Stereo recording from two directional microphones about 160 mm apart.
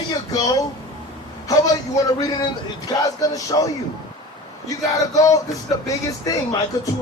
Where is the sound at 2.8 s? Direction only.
20° left (ahead or behind).